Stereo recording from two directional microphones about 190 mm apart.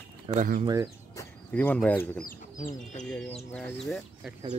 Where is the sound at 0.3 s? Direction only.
40° right (ahead or behind).